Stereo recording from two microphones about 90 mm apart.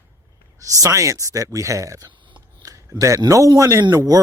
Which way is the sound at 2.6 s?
40° right (ahead or behind).